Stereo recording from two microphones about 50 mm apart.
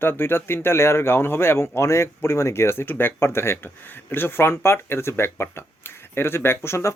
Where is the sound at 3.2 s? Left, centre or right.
Left.